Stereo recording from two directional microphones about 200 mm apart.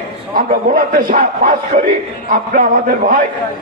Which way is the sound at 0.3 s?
45° right (ahead or behind).